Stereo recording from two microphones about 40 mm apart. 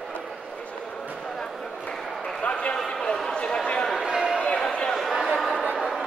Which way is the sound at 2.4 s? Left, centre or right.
Left.